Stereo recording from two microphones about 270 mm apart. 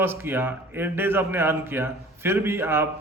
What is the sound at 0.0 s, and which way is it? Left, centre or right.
A man's voice, centre.